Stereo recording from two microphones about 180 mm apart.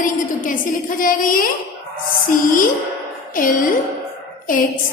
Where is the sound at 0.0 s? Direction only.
50° left (ahead or behind).